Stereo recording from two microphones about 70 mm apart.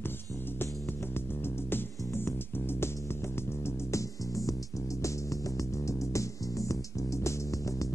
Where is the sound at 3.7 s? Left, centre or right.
Left.